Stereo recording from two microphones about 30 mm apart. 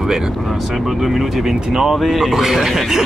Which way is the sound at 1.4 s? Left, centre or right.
Centre.